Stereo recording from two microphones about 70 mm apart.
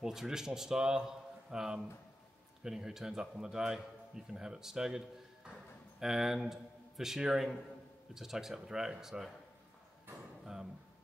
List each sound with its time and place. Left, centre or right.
0.0 s a man's voice: centre
10.4 s speech: centre